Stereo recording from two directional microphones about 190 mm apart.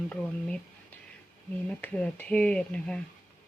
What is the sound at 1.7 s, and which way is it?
Speech, 5° left (ahead or behind).